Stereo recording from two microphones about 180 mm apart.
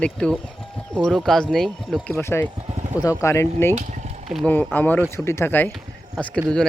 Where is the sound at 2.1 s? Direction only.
15° left (ahead or behind).